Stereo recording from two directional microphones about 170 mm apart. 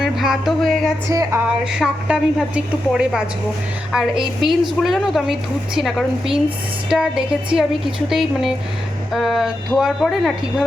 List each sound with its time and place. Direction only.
0.0 s music: centre (ahead or behind)
1.1 s music: 20° right (ahead or behind)
1.5 s a woman's voice: 5° right (ahead or behind)